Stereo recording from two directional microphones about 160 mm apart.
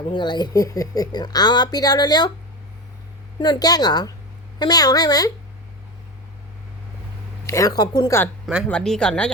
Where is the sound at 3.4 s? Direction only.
25° left (ahead or behind).